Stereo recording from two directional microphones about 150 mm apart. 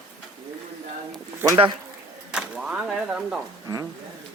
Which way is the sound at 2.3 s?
5° right (ahead or behind).